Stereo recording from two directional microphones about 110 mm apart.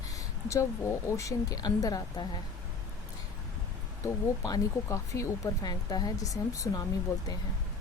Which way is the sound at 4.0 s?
30° left (ahead or behind).